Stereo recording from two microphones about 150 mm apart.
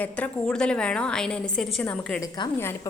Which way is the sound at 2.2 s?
20° left (ahead or behind).